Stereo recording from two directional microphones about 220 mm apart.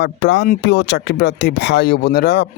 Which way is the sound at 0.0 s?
50° left (ahead or behind).